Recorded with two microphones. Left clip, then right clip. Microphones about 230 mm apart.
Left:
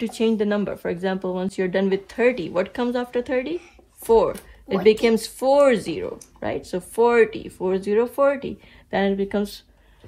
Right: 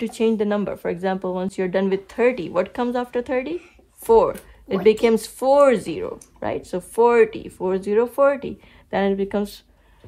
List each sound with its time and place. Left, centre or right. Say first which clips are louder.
0.0 s speech: right 1 dB; right